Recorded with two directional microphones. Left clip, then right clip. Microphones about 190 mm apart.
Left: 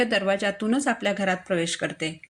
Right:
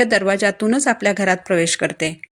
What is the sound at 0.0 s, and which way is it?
A woman's voice, 40° right (ahead or behind).